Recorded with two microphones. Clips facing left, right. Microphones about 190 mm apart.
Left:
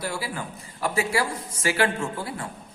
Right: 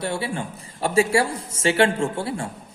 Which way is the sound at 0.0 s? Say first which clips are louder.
Right 4 dB; 25° right (ahead or behind).